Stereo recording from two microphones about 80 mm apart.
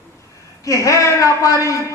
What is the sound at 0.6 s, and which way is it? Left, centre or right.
A man's voice, left.